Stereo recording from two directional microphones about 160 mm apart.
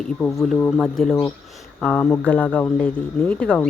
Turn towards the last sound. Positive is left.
turn(degrees=10)  # may be behind; listen again after turning